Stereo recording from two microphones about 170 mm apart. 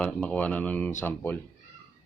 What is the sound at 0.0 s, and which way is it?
Speech, 5° left (ahead or behind).